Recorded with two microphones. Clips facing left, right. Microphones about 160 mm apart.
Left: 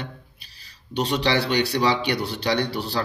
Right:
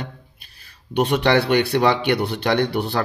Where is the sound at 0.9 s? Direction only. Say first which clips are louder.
Right 5 dB; 55° right (ahead or behind).